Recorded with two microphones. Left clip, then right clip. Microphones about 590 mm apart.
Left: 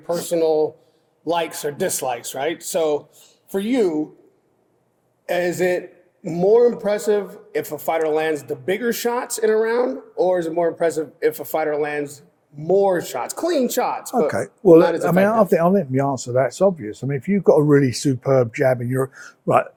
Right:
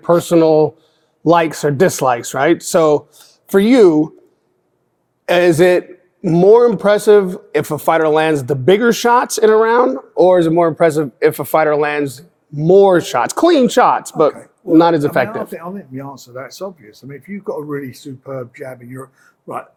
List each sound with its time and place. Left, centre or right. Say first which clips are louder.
0.3 s speech: right 4 dB; right
5.2 s a man's voice: right 9 dB; right
15.5 s speech: left 11 dB; left